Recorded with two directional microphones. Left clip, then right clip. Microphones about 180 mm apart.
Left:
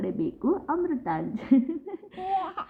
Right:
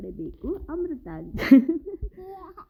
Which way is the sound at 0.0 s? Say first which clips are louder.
Left 7 dB; 15° right (ahead or behind).